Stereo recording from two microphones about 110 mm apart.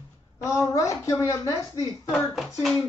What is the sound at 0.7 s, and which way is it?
Speech, 30° left (ahead or behind).